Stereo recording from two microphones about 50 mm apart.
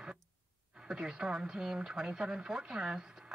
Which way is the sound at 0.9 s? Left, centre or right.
Centre.